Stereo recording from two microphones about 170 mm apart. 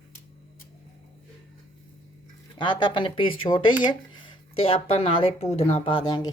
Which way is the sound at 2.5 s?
25° left (ahead or behind).